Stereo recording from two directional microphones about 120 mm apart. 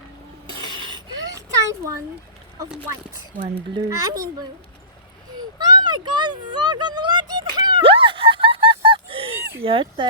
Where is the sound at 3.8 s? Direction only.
30° right (ahead or behind).